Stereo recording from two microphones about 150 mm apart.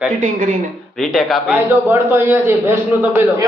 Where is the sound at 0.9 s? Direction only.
Centre (ahead or behind).